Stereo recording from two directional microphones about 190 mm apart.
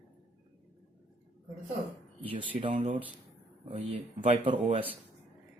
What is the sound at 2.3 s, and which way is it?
Speech, 25° right (ahead or behind).